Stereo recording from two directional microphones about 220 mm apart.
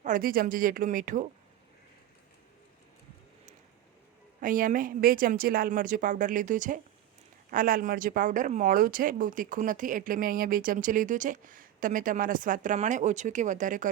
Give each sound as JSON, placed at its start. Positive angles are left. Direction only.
{"t": 0.0, "sound": "speech", "side_deg": -40}
{"t": 4.4, "sound": "speech", "side_deg": -40}